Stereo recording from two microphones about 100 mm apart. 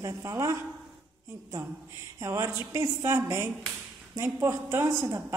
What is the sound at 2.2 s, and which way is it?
A woman's voice, 30° right (ahead or behind).